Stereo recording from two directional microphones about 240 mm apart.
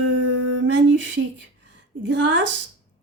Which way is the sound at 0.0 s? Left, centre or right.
Right.